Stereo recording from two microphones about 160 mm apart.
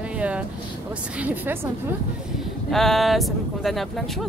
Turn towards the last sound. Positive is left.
turn(degrees=0)  # may be behind; listen again after turning